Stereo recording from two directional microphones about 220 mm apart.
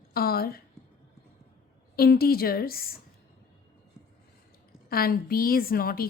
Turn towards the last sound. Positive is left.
turn(degrees=40)  # may be behind; listen again after turning